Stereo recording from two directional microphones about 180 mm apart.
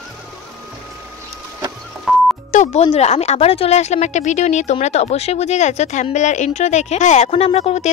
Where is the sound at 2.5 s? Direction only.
35° left (ahead or behind).